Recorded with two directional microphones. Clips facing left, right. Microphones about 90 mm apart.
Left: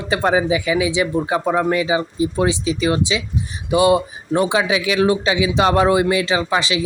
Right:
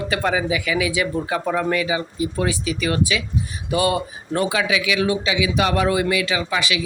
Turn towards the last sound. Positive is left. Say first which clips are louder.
# left 4 dB
turn(degrees=30)  # may be behind; listen again after turning